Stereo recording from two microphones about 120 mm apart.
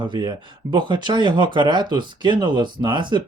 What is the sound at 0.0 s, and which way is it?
Speech, 40° right (ahead or behind).